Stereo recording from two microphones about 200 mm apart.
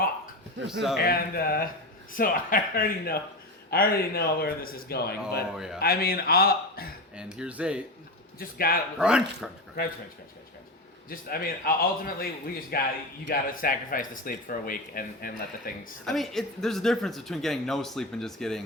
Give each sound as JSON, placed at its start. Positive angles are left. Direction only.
{"t": 0.7, "sound": "speech", "side_deg": 0}
{"t": 0.9, "sound": "speech", "side_deg": 50}
{"t": 5.5, "sound": "speech", "side_deg": -5}
{"t": 5.8, "sound": "speech", "side_deg": 50}
{"t": 7.2, "sound": "speech", "side_deg": -5}
{"t": 8.4, "sound": "speech", "side_deg": 45}
{"t": 9.0, "sound": "speech", "side_deg": -5}
{"t": 11.1, "sound": "speech", "side_deg": 45}
{"t": 16.0, "sound": "speech", "side_deg": 0}